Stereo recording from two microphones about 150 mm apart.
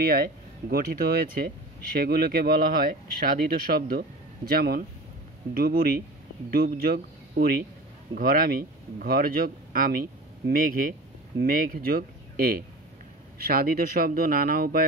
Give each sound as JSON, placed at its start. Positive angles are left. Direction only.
{"t": 0.0, "sound": "speech", "side_deg": -90}
{"t": 8.1, "sound": "speech", "side_deg": -70}